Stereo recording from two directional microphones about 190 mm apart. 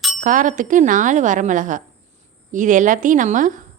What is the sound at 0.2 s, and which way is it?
A woman's voice, 40° right (ahead or behind).